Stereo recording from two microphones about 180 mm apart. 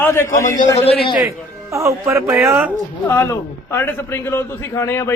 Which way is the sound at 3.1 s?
15° left (ahead or behind).